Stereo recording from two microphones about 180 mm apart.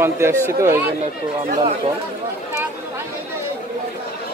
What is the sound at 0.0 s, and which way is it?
Speech, 15° right (ahead or behind).